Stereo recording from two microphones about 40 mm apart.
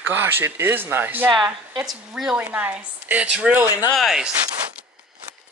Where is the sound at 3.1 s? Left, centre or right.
Right.